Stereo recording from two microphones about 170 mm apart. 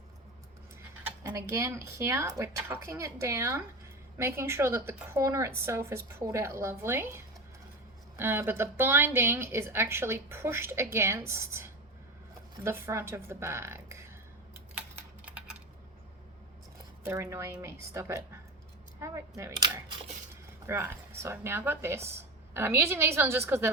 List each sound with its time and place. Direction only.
1.2 s a woman's voice: 15° right (ahead or behind)
8.2 s a woman's voice: 15° right (ahead or behind)
17.0 s a woman's voice: 15° right (ahead or behind)